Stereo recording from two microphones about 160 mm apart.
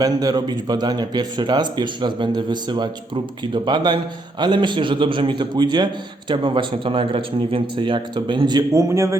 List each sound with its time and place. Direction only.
0.0 s a man's voice: 25° right (ahead or behind)